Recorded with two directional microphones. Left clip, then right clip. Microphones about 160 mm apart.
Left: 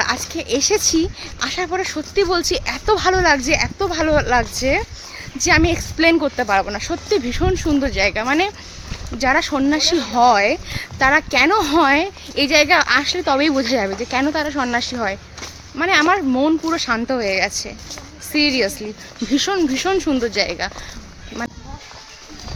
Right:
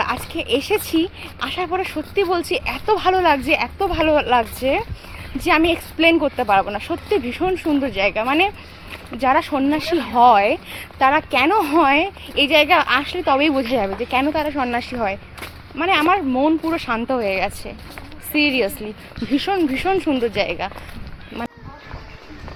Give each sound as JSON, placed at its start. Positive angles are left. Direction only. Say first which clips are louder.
{"t": 0.0, "sound": "speech", "louder": "left 2 dB", "side_deg": 25}